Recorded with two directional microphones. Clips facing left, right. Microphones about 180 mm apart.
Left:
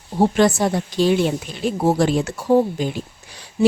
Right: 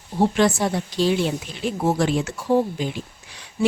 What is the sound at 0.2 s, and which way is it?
Speech, 40° left (ahead or behind).